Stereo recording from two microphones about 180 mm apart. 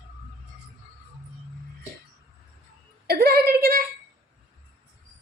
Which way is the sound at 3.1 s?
60° right (ahead or behind).